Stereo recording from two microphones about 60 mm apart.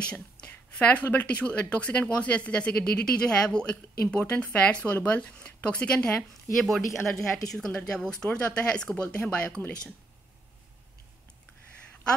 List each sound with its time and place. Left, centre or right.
0.0 s a woman's voice: centre
0.5 s a sound: left
1.0 s speech: left
6.6 s a woman's voice: centre; by 9.2 s left